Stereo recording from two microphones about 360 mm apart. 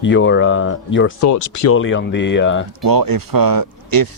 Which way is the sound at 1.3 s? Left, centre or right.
Left.